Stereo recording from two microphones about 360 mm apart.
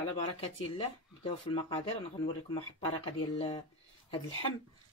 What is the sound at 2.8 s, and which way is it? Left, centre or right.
Speech, centre.